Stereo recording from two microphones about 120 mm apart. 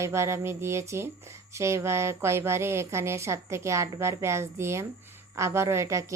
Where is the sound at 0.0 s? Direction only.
25° right (ahead or behind).